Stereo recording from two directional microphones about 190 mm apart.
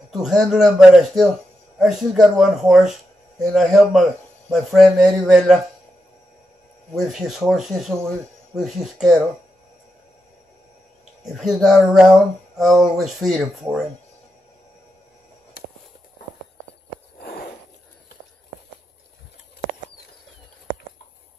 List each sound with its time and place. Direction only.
0.1 s speech: centre (ahead or behind)
7.0 s speech: centre (ahead or behind)
11.3 s speech: centre (ahead or behind)
17.2 s a sound: 55° left (ahead or behind)